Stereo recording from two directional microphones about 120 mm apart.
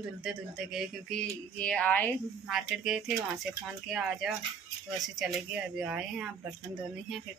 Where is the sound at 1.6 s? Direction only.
10° left (ahead or behind).